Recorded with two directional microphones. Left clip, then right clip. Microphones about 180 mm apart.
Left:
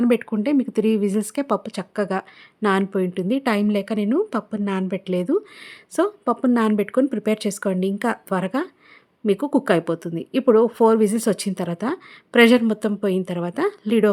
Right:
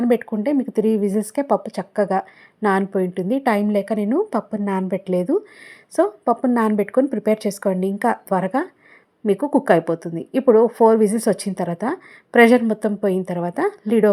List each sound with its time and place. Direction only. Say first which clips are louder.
0.0 s a woman's voice: right 1 dB; 20° left (ahead or behind)